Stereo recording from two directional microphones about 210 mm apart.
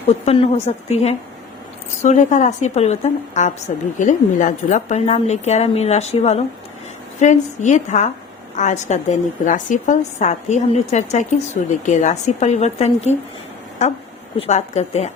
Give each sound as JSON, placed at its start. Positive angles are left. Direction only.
{"t": 0.3, "sound": "a woman's voice", "side_deg": 30}
{"t": 14.3, "sound": "a woman's voice", "side_deg": 30}